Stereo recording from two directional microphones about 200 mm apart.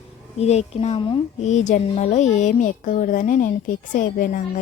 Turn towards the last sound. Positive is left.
turn(degrees=45)  # may be behind; listen again after turning